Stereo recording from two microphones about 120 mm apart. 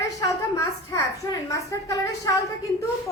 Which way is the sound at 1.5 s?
30° left (ahead or behind).